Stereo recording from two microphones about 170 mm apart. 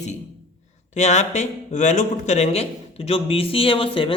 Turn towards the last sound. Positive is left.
turn(degrees=30)  # may be behind; listen again after turning